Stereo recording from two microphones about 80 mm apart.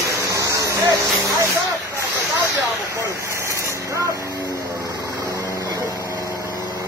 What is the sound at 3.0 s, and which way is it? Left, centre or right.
Vehicle, right.